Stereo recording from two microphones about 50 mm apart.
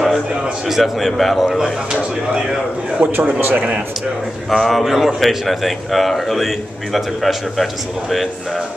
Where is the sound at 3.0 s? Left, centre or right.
Right.